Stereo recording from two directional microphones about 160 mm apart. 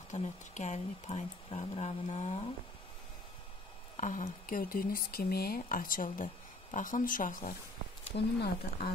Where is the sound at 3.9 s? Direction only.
50° left (ahead or behind).